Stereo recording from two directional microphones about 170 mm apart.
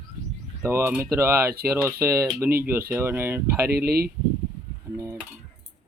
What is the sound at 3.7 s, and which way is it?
Speech, 65° right (ahead or behind).